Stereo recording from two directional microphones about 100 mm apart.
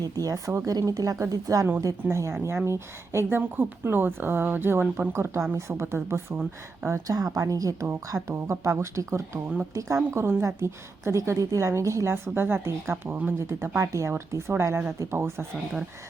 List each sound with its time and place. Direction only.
0.0 s a woman's voice: 35° right (ahead or behind)
7.9 s speech: 25° right (ahead or behind)